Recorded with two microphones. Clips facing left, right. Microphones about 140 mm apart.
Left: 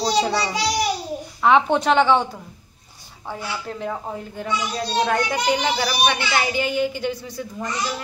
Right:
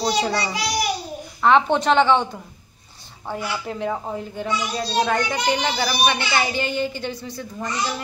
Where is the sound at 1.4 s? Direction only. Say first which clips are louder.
Even; 5° left (ahead or behind).